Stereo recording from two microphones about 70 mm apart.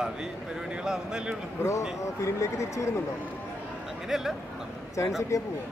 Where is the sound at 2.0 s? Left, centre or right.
Left.